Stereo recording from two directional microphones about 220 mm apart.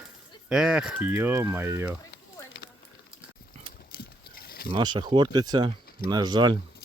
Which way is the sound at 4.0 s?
45° left (ahead or behind).